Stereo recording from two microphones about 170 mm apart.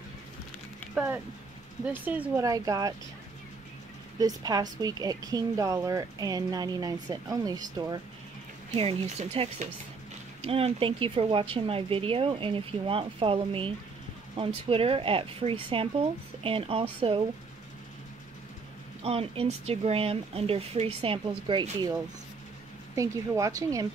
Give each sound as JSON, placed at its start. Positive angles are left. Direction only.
{"t": 0.9, "sound": "speech", "side_deg": -10}
{"t": 2.4, "sound": "speech", "side_deg": -20}
{"t": 4.2, "sound": "speech", "side_deg": -20}
{"t": 8.7, "sound": "speech", "side_deg": -35}
{"t": 19.0, "sound": "speech", "side_deg": -35}
{"t": 22.9, "sound": "speech", "side_deg": -20}